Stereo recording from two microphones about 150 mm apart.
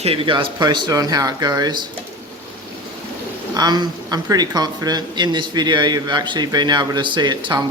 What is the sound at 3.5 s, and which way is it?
Speech, 25° right (ahead or behind).